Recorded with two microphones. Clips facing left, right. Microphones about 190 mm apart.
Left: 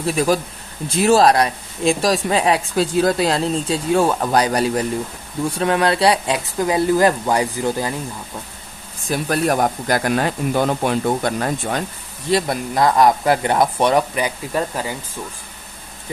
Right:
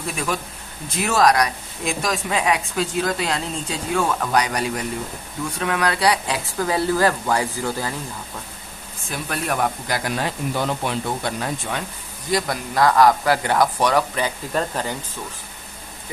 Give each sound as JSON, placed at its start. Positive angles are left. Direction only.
{"t": 0.9, "sound": "speech", "side_deg": 30}
{"t": 9.0, "sound": "speech", "side_deg": 40}
{"t": 12.3, "sound": "speech", "side_deg": 25}